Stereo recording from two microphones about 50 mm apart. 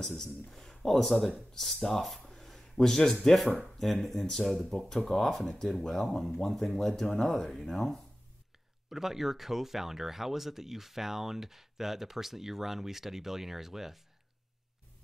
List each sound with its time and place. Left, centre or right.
0.2 s speech: centre